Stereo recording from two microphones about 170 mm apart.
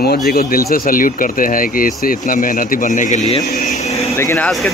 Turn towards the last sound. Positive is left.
turn(degrees=15)  # may be behind; listen again after turning